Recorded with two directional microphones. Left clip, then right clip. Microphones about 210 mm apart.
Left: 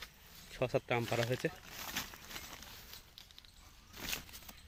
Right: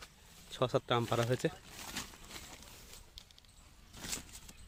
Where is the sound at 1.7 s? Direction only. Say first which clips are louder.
Left 2 dB; centre (ahead or behind).